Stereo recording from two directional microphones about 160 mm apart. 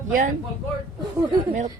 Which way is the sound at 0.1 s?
55° right (ahead or behind).